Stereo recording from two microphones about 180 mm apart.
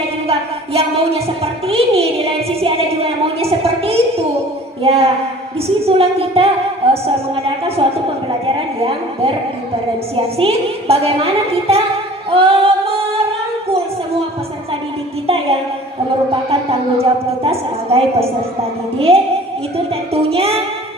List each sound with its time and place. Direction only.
0.3 s a woman's voice: 35° right (ahead or behind)
10.1 s a woman's voice: 30° right (ahead or behind)
12.3 s singing: 30° right (ahead or behind)
17.0 s a woman's voice: 35° right (ahead or behind)
20.2 s a woman's voice: 35° right (ahead or behind)